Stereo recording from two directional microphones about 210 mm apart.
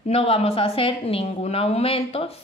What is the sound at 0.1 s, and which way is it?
A woman's voice, 30° left (ahead or behind).